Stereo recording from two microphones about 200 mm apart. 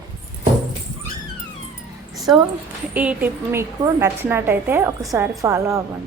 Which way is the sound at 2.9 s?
5° right (ahead or behind).